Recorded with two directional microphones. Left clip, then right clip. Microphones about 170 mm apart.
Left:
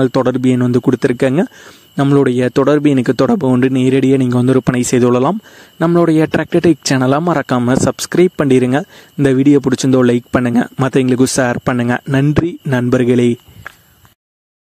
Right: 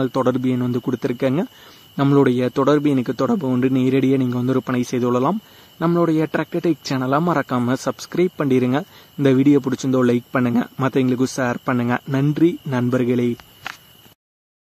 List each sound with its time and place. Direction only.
0.0 s speech: 45° left (ahead or behind)